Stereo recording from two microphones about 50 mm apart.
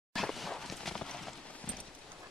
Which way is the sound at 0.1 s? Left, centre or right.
Centre.